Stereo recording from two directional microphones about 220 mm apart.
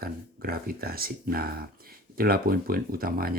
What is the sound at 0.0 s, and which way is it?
Speech, 45° right (ahead or behind).